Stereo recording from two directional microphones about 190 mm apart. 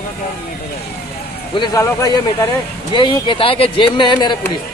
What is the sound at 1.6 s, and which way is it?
Speech, 15° left (ahead or behind).